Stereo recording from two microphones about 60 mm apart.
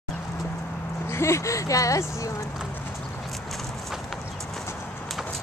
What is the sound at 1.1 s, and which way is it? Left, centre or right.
Speech, left.